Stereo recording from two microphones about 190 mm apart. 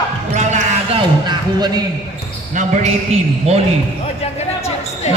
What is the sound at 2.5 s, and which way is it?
A man's voice, 40° right (ahead or behind).